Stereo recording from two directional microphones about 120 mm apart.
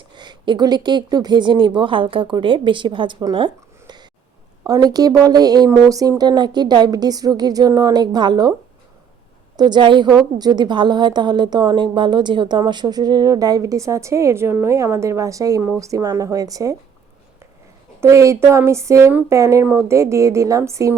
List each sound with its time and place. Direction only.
0.2 s a woman's voice: 40° right (ahead or behind)
9.6 s a woman's voice: 40° right (ahead or behind)
18.0 s a woman's voice: 25° right (ahead or behind)